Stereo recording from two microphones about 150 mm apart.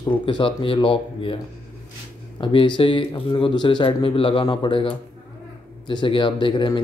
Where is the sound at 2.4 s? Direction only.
35° left (ahead or behind).